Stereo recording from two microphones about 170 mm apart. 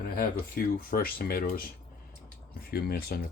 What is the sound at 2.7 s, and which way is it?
Speech, 65° left (ahead or behind).